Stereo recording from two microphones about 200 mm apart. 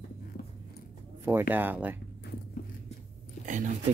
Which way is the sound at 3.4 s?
40° right (ahead or behind).